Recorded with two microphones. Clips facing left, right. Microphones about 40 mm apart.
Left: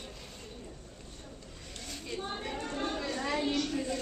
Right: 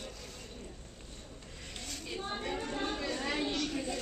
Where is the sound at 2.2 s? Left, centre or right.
Centre.